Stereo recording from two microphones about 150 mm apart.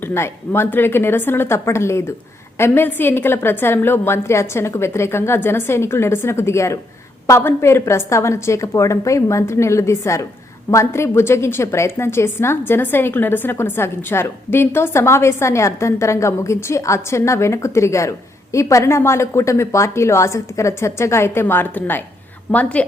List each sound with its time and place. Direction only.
0.0 s a woman's voice: 15° left (ahead or behind)